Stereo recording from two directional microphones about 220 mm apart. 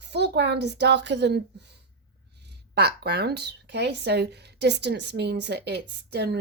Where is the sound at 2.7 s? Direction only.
50° right (ahead or behind).